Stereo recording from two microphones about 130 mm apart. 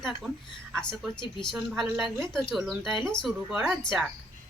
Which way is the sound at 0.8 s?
5° left (ahead or behind).